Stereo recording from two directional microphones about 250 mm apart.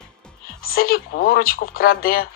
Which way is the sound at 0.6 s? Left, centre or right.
Left.